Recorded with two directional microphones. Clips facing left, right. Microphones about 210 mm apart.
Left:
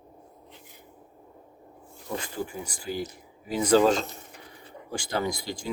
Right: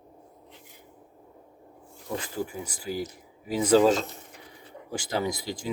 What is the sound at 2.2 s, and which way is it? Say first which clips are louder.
Speech: right 1 dB; 5° right (ahead or behind).